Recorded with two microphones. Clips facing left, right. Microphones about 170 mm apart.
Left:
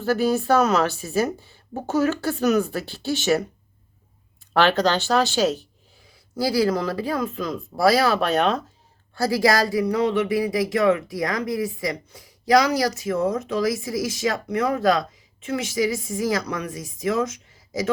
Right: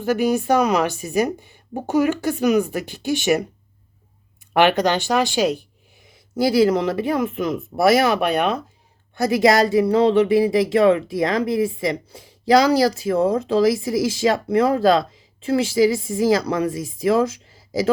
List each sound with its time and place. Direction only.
0.0 s speech: 15° right (ahead or behind)
4.5 s speech: 15° right (ahead or behind)